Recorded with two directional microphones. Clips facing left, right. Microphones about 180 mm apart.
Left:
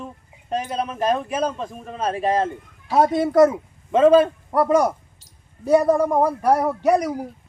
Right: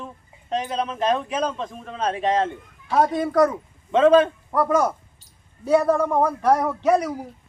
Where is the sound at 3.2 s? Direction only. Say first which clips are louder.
Left 4 dB; 20° left (ahead or behind).